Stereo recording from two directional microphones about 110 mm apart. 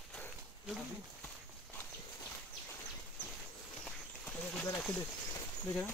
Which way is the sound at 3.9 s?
10° left (ahead or behind).